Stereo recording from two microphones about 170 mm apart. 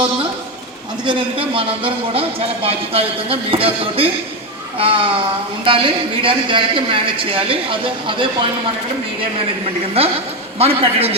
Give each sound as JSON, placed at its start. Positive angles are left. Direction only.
{"t": 1.0, "sound": "speech", "side_deg": -30}
{"t": 10.6, "sound": "speech", "side_deg": -35}